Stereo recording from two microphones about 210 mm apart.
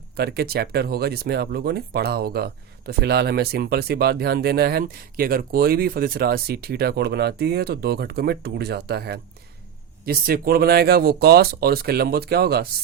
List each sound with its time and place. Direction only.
0.2 s speech: 50° right (ahead or behind)